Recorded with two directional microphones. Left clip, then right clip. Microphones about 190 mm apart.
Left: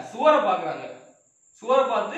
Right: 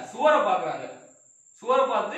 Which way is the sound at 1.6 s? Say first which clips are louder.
Left 1 dB; 20° left (ahead or behind).